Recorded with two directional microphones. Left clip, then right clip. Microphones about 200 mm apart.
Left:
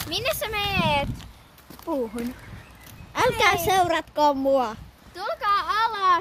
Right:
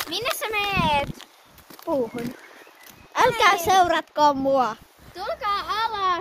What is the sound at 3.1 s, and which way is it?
A woman's voice, 5° right (ahead or behind).